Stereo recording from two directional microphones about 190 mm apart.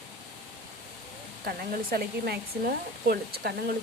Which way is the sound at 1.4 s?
50° right (ahead or behind).